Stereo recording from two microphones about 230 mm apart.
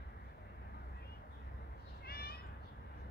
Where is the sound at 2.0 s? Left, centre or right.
Left.